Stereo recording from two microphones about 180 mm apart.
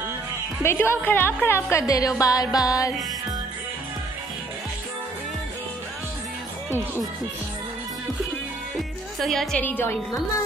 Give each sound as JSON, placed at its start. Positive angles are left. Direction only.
{"t": 0.6, "sound": "a woman's voice", "side_deg": 15}
{"t": 8.7, "sound": "speech", "side_deg": 0}